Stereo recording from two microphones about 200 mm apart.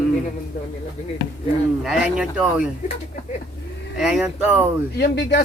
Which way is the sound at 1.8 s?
5° right (ahead or behind).